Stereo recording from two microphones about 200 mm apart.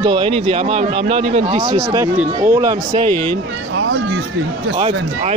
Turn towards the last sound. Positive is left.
turn(degrees=-30)  # may be behind; listen again after turning